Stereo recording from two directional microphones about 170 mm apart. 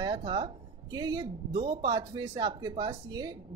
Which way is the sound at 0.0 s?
25° right (ahead or behind).